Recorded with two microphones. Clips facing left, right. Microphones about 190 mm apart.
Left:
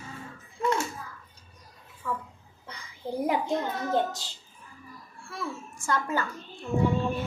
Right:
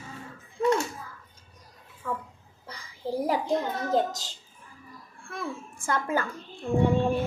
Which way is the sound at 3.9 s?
40° right (ahead or behind).